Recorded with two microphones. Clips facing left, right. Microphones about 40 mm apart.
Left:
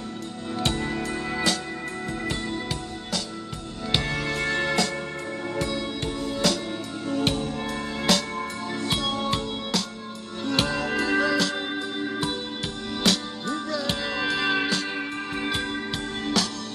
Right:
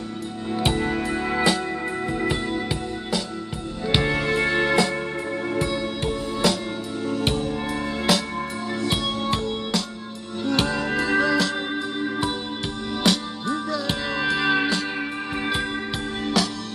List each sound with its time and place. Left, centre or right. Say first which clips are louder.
0.6 s music: right 4 dB; centre
3.9 s music: right 5 dB; centre
16.4 s music: right 3 dB; centre